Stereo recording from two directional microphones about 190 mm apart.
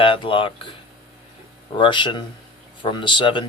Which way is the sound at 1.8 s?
25° left (ahead or behind).